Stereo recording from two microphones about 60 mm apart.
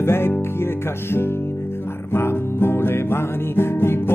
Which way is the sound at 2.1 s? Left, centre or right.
Left.